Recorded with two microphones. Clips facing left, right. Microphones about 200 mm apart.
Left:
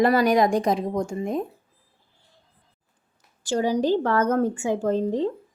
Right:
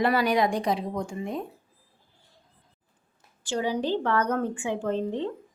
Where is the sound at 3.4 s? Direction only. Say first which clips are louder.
Left 5 dB; 40° left (ahead or behind).